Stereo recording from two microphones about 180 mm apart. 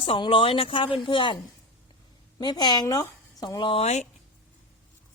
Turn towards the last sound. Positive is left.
turn(degrees=35)  # may be behind; listen again after turning